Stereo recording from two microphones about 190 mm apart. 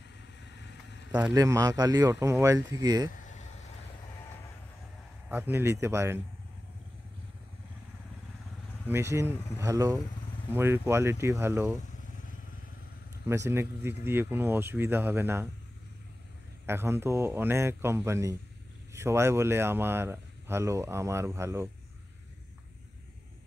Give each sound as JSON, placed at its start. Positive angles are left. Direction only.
{"t": 1.3, "sound": "speech", "side_deg": -20}
{"t": 5.3, "sound": "speech", "side_deg": -10}
{"t": 8.8, "sound": "speech", "side_deg": -15}
{"t": 13.3, "sound": "speech", "side_deg": -15}
{"t": 16.6, "sound": "speech", "side_deg": -15}